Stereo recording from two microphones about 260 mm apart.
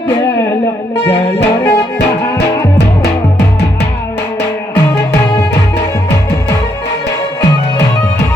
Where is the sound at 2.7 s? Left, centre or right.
Left.